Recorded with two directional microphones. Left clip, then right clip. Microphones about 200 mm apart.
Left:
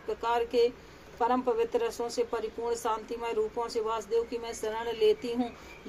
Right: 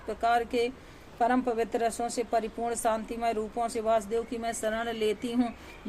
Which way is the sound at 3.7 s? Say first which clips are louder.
Right 3 dB; 45° right (ahead or behind).